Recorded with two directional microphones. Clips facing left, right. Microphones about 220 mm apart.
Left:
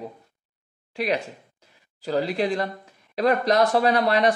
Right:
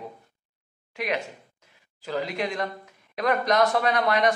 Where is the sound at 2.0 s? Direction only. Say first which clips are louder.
Left 5 dB; 35° left (ahead or behind).